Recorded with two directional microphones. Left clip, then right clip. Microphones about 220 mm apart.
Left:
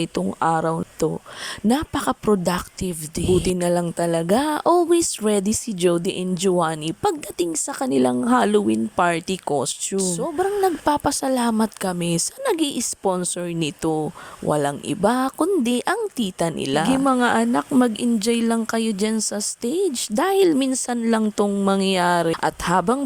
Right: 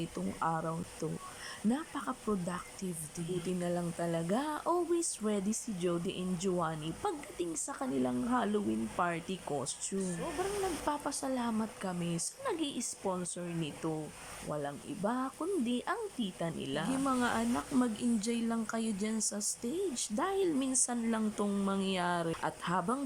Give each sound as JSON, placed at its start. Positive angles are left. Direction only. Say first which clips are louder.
{"t": 0.0, "sound": "speech", "louder": "left 14 dB", "side_deg": 45}